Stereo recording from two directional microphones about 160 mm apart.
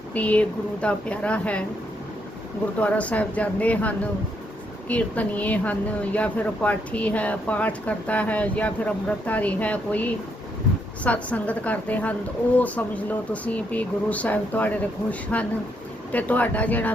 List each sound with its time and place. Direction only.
0.1 s speech: 10° left (ahead or behind)
2.8 s speech: 10° left (ahead or behind)